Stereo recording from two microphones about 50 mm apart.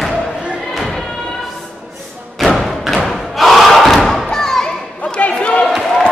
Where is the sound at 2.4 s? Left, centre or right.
Centre.